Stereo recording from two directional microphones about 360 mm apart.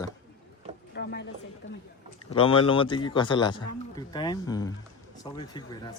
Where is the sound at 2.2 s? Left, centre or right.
Centre.